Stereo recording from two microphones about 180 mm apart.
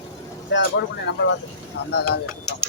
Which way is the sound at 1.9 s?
65° left (ahead or behind).